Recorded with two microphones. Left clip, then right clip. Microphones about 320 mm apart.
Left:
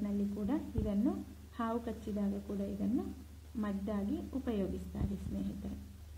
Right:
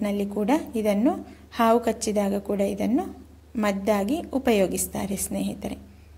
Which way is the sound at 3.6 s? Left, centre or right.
Right.